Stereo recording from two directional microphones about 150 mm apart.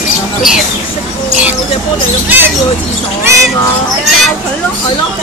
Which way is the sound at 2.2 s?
15° right (ahead or behind).